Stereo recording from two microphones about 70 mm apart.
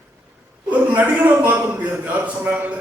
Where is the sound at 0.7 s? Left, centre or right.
Right.